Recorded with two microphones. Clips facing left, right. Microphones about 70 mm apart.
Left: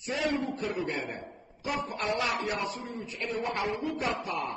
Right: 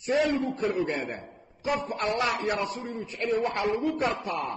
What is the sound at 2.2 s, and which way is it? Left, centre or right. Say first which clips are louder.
Speech: right 3 dB; right.